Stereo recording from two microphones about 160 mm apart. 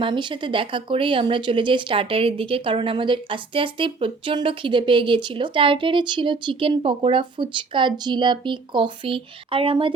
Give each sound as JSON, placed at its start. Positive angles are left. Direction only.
{"t": 0.0, "sound": "speech", "side_deg": -30}